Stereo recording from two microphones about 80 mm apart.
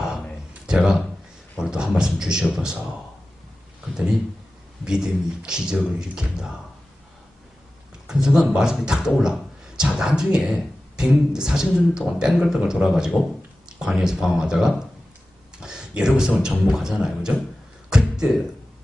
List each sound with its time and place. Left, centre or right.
0.7 s speech: centre
4.9 s speech: centre
8.0 s speech: centre
15.5 s a sound: centre
16.4 s speech: centre
17.8 s a sound: centre